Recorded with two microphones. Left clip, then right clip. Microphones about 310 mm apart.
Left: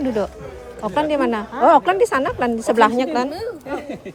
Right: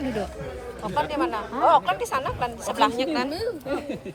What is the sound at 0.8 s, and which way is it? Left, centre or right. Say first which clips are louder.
Speech: left 6 dB; left.